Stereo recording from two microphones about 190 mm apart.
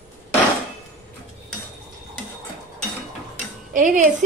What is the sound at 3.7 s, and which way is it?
Speech, 40° right (ahead or behind).